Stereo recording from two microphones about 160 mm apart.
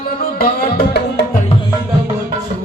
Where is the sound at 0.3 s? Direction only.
70° left (ahead or behind).